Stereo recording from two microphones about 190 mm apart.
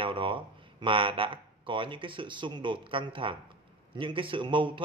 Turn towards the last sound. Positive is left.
turn(degrees=-25)  # may be behind; listen again after turning